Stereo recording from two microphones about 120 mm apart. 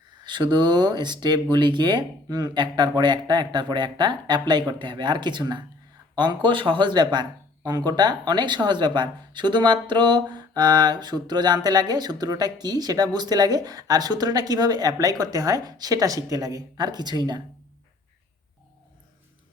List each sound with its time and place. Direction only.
0.3 s speech: 40° right (ahead or behind)